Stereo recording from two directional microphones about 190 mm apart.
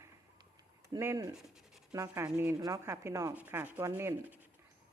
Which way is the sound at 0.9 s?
15° right (ahead or behind).